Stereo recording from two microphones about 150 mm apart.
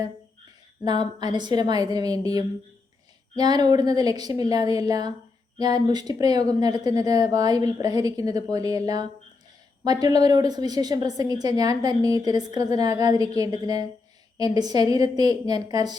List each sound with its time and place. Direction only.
0.9 s a woman's voice: 30° right (ahead or behind)
9.8 s a woman's voice: 25° right (ahead or behind)